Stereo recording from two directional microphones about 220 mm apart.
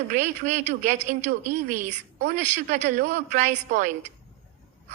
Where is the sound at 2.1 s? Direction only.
35° right (ahead or behind).